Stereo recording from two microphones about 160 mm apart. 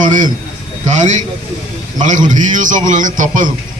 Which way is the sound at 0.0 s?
50° right (ahead or behind).